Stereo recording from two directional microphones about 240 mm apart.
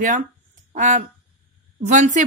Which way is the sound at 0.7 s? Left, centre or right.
Right.